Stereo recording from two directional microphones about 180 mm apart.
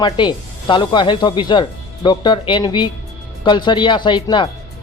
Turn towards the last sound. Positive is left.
turn(degrees=25)  # may be behind; listen again after turning